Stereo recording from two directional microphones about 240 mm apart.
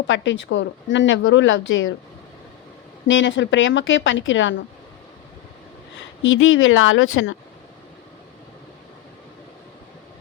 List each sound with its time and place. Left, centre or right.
0.1 s a woman's voice: left
3.1 s a woman's voice: left
6.2 s speech: left